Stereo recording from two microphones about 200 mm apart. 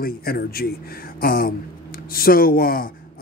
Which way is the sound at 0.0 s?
50° left (ahead or behind).